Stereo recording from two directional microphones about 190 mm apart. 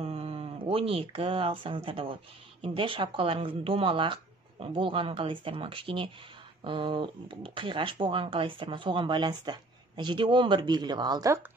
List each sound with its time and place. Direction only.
0.0 s speech: 30° right (ahead or behind)